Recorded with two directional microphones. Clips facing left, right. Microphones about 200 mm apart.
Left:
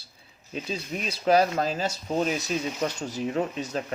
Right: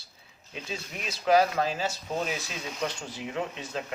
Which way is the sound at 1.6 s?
40° left (ahead or behind).